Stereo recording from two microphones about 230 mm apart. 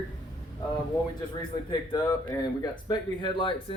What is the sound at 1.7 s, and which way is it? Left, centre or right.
Speech, centre.